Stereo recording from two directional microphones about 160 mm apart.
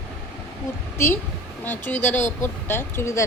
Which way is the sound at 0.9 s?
15° left (ahead or behind).